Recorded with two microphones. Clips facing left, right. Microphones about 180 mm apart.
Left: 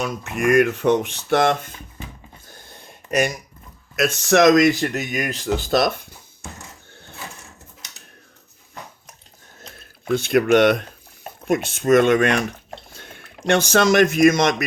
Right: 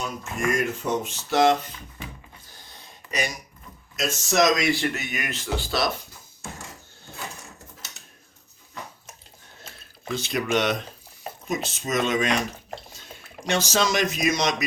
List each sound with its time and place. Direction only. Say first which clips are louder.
0.0 s speech: left 6 dB; 65° left (ahead or behind)
2.5 s a sound: left 5 dB; 50° left (ahead or behind)
3.9 s speech: left 6 dB; 65° left (ahead or behind)
9.7 s drip: left 3 dB; 5° right (ahead or behind)
10.1 s speech: left 9 dB; 55° left (ahead or behind)